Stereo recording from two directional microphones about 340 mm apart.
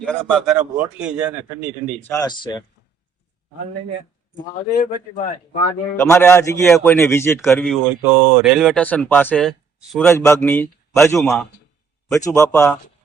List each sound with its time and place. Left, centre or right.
0.0 s a man's voice: centre
4.8 s a man's voice: left
6.0 s a man's voice: centre